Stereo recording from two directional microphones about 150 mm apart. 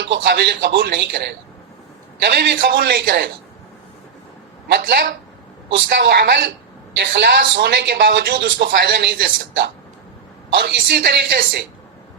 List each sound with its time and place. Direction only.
0.2 s a woman's voice: 90° right
4.8 s a woman's voice: 90° right